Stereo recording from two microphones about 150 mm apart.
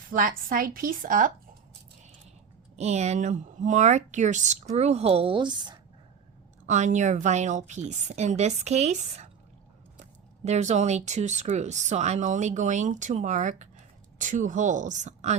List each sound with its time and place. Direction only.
0.1 s a woman's voice: 65° right (ahead or behind)
2.7 s speech: 50° right (ahead or behind); by 5.8 s 30° right (ahead or behind)
6.7 s speech: 55° right (ahead or behind)
10.4 s speech: 50° right (ahead or behind)